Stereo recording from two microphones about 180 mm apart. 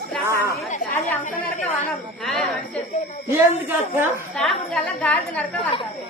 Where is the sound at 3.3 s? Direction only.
10° right (ahead or behind).